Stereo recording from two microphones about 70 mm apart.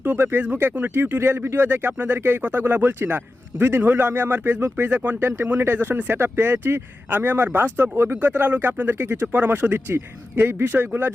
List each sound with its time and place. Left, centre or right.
0.0 s speech: right
8.2 s speech: right